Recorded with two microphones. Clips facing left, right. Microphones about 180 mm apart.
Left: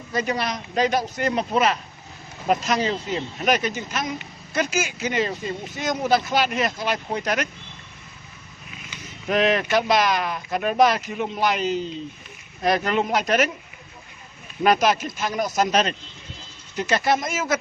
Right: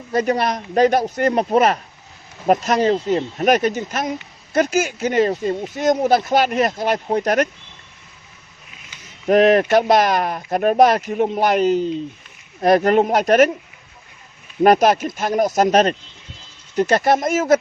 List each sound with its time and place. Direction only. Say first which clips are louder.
0.1 s speech: right 6 dB; 55° right (ahead or behind)
9.2 s speech: right 8 dB; 50° right (ahead or behind)
14.6 s speech: right 6 dB; 50° right (ahead or behind)